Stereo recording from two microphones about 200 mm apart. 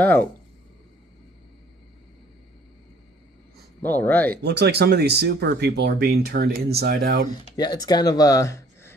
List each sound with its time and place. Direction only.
0.0 s speech: 10° left (ahead or behind)
3.8 s speech: 10° left (ahead or behind)
4.4 s speech: 55° right (ahead or behind)
7.2 s speech: 20° left (ahead or behind)